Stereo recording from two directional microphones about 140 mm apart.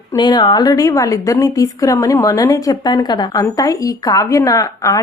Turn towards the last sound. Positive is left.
turn(degrees=25)  # may be behind; listen again after turning